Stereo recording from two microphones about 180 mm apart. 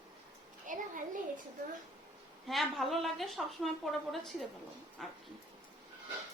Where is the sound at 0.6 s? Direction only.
45° right (ahead or behind).